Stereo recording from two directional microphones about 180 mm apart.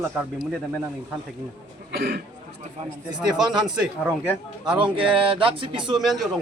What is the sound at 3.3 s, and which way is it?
Speech, 5° right (ahead or behind).